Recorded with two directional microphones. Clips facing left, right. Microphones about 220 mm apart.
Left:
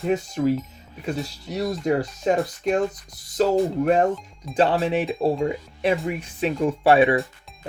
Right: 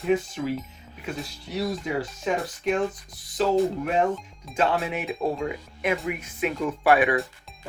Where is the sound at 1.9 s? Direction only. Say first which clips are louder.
Left 6 dB; 40° left (ahead or behind).